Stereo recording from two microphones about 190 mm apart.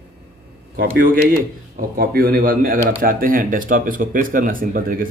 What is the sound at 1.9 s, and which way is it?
Speech, 50° right (ahead or behind).